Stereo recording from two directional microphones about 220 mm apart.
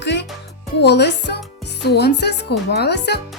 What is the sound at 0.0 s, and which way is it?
Music, 55° left (ahead or behind).